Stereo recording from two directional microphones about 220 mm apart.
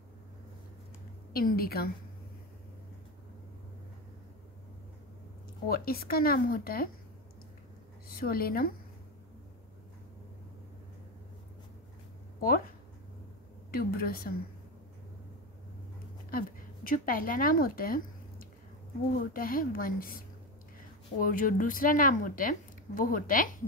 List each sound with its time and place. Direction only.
1.3 s speech: 45° left (ahead or behind)
5.7 s speech: 45° left (ahead or behind)
8.1 s speech: 45° left (ahead or behind)
12.4 s speech: 40° left (ahead or behind)
16.3 s speech: 40° left (ahead or behind)